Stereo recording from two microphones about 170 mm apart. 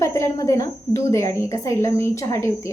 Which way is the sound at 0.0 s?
20° left (ahead or behind).